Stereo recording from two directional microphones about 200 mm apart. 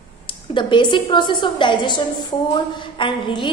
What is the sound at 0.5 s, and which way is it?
A woman's voice, 25° left (ahead or behind).